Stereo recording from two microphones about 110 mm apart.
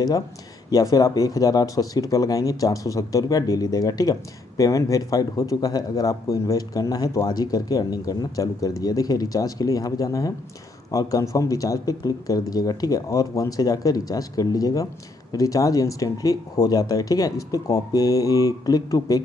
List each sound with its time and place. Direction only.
0.7 s speech: 30° left (ahead or behind)